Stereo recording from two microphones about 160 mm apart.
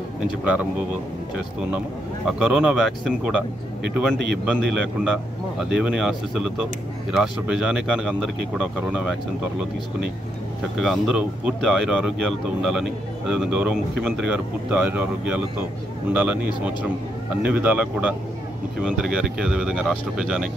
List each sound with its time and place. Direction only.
2.2 s speech: 5° right (ahead or behind)
4.5 s speech: 10° right (ahead or behind)
10.8 s speech: centre (ahead or behind)
17.4 s speech: 10° right (ahead or behind)